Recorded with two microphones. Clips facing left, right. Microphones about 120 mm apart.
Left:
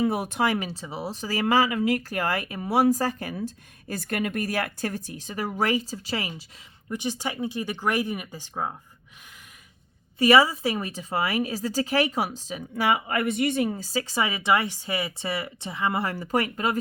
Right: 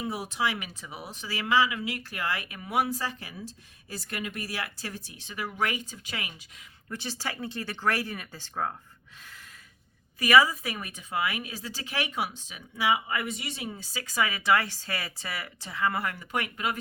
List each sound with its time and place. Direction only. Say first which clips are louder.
0.0 s speech: left 6 dB; 55° left (ahead or behind); by 6.3 s 35° left (ahead or behind)
6.9 s speech: left 6 dB; 15° left (ahead or behind)
10.2 s speech: left 3 dB; 30° left (ahead or behind); by 14.0 s 45° left (ahead or behind)
14.0 s speech: right 1 dB; 30° left (ahead or behind)
16.1 s speech: left 7 dB; 35° left (ahead or behind)